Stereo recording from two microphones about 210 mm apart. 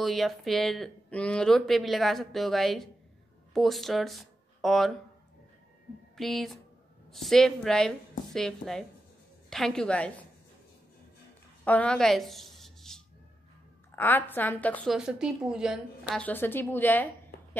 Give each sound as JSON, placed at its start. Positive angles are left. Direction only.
{"t": 0.0, "sound": "speech", "side_deg": 0}
{"t": 6.1, "sound": "speech", "side_deg": 0}
{"t": 11.6, "sound": "a sound", "side_deg": 5}
{"t": 13.9, "sound": "a woman's voice", "side_deg": 10}